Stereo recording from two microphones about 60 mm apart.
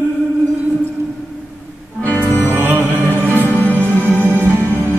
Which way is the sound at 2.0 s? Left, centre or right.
Left.